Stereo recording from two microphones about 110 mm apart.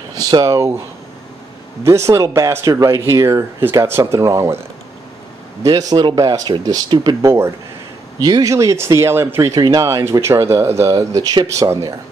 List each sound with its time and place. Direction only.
0.1 s speech: 35° right (ahead or behind)
1.9 s speech: 25° right (ahead or behind)
5.6 s speech: 35° right (ahead or behind)